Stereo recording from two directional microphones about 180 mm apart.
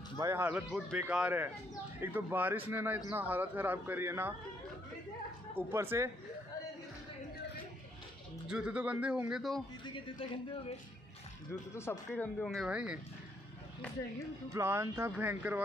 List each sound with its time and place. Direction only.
0.2 s speech: 15° right (ahead or behind)
5.5 s speech: 10° right (ahead or behind)
8.5 s speech: 5° right (ahead or behind)
9.8 s speech: 25° left (ahead or behind)
11.7 s speech: 15° left (ahead or behind); by 13.0 s 5° right (ahead or behind)
14.5 s speech: 15° right (ahead or behind)